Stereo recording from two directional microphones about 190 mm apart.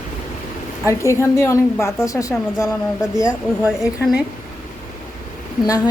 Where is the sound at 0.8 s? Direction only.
15° left (ahead or behind).